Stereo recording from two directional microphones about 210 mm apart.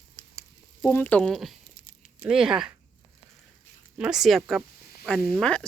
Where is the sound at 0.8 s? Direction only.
10° left (ahead or behind).